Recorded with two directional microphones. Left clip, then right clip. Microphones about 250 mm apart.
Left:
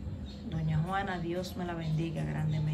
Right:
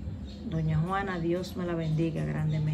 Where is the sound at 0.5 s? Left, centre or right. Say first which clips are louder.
Right 4 dB; centre.